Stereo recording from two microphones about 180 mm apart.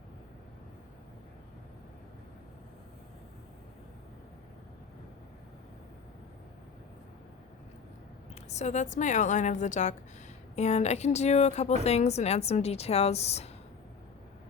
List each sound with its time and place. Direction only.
8.4 s a woman's voice: 40° left (ahead or behind)